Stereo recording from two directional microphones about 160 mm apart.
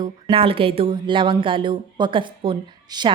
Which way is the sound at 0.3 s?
35° right (ahead or behind).